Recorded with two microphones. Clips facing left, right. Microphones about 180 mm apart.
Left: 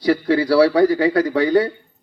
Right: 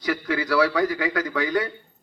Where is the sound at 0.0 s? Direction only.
30° left (ahead or behind).